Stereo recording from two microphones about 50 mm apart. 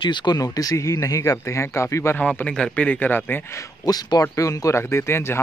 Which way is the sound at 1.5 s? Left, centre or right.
Left.